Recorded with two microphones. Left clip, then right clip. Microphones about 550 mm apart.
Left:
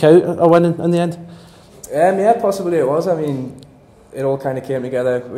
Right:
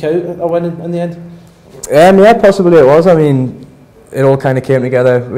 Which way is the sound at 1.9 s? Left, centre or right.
Right.